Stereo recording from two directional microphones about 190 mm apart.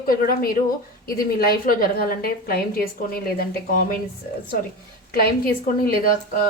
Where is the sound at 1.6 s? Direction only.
50° left (ahead or behind).